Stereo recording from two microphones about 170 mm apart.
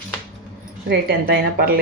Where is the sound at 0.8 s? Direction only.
65° right (ahead or behind).